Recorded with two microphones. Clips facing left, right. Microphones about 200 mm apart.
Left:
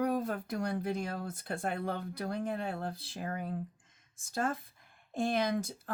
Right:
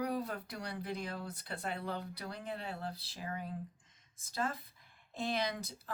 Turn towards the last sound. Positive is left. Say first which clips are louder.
# left 6 dB
turn(degrees=50)  # may be behind; listen again after turning